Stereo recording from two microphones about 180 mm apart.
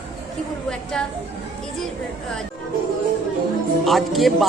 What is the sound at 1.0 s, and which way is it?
Speech, 5° left (ahead or behind).